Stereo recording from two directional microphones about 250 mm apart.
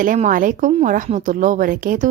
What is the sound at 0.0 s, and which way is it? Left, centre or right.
Speech, right.